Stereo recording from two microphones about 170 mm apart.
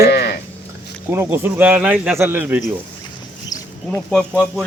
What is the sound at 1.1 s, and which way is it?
Speech, 15° right (ahead or behind).